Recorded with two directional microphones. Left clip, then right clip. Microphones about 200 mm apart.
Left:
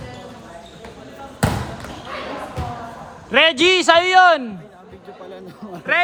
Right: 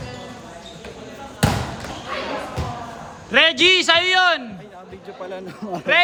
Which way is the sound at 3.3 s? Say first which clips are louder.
Even; 5° left (ahead or behind).